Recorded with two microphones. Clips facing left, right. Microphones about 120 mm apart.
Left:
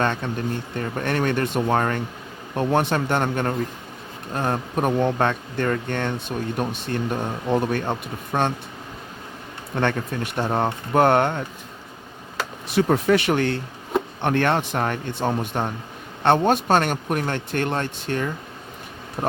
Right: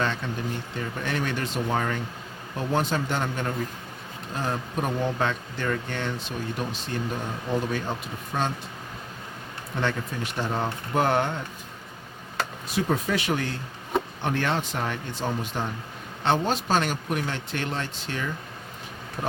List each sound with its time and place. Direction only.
0.0 s a man's voice: 55° left (ahead or behind)
9.7 s a man's voice: 55° left (ahead or behind)
12.6 s a man's voice: 65° left (ahead or behind)
19.2 s speech: 35° left (ahead or behind)